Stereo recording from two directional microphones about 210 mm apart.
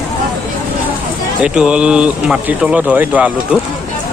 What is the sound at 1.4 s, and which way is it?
Speech, 5° right (ahead or behind).